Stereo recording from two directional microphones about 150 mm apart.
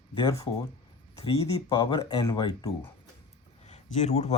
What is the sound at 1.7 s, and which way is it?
Speech, 35° left (ahead or behind).